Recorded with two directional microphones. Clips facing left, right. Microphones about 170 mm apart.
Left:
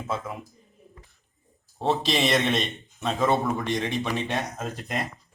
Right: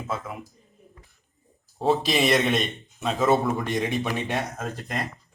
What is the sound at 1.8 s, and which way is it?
A man's voice, 5° right (ahead or behind).